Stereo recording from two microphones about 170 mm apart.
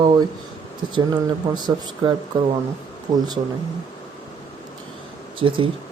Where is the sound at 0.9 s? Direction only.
25° right (ahead or behind).